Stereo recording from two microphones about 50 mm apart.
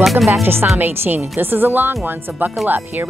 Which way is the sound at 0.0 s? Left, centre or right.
Centre.